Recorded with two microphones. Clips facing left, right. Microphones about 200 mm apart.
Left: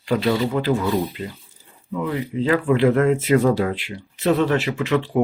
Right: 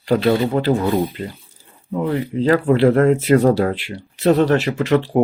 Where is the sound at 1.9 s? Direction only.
40° right (ahead or behind).